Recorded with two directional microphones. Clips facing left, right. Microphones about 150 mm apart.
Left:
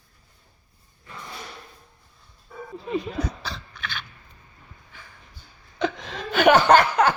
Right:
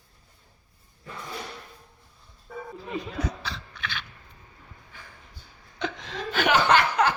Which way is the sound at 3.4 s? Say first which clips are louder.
Left 1 dB; 40° left (ahead or behind).